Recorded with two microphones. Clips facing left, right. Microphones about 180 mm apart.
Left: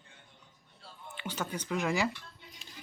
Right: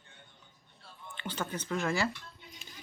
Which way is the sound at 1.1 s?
10° left (ahead or behind).